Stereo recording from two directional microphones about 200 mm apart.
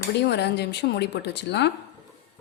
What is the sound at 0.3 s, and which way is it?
Speech, 55° left (ahead or behind).